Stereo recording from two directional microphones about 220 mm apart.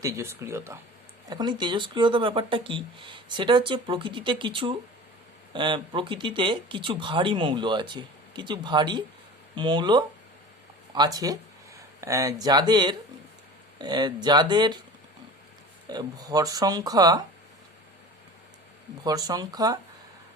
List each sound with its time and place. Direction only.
0.0 s speech: 15° right (ahead or behind)
15.9 s speech: 15° right (ahead or behind)
19.0 s speech: 15° right (ahead or behind)